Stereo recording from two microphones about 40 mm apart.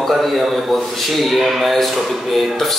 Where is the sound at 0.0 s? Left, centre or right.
Centre.